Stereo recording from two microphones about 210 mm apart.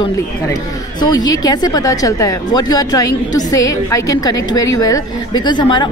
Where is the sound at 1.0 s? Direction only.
20° left (ahead or behind).